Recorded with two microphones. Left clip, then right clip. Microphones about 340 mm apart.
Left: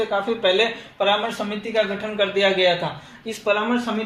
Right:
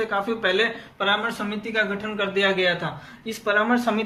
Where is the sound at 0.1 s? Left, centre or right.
Centre.